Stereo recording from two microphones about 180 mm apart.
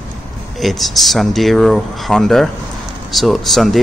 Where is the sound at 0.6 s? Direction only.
Centre (ahead or behind).